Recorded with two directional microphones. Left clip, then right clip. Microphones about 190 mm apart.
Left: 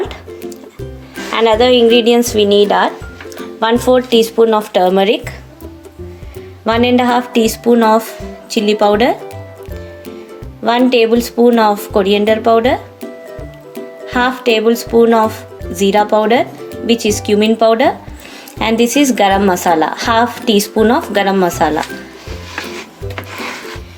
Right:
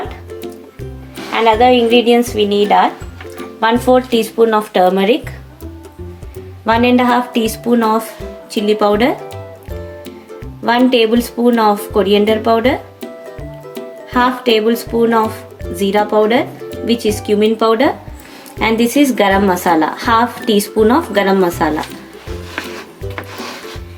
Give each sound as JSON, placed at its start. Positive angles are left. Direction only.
{"t": 1.3, "sound": "speech", "side_deg": 45}
{"t": 6.7, "sound": "a woman's voice", "side_deg": 30}
{"t": 10.6, "sound": "speech", "side_deg": 30}
{"t": 14.1, "sound": "speech", "side_deg": 30}